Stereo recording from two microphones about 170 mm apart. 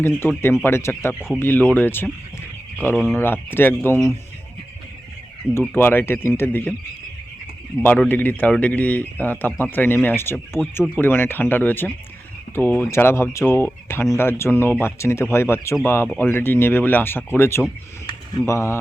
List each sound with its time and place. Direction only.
0.0 s speech: 15° left (ahead or behind)
5.5 s speech: 15° left (ahead or behind)
7.8 s speech: 10° left (ahead or behind)